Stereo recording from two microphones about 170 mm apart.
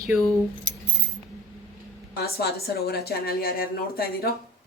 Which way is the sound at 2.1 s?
70° left (ahead or behind).